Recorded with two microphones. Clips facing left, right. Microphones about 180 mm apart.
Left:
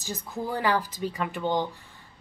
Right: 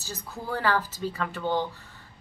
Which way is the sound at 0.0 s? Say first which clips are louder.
Left 4 dB; 15° left (ahead or behind).